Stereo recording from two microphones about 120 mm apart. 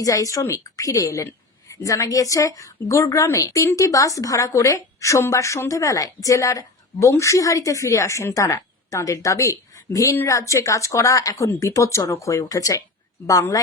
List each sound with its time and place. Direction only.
0.0 s a woman's voice: 30° left (ahead or behind)